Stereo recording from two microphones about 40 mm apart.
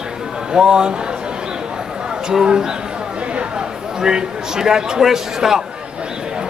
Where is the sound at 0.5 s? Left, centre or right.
Centre.